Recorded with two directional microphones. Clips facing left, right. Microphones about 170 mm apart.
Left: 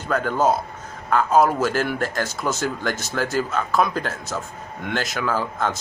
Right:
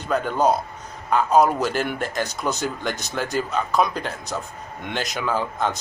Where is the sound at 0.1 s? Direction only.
15° right (ahead or behind).